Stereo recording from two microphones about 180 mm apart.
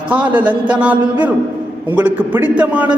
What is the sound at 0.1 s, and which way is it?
A man's voice, 10° right (ahead or behind).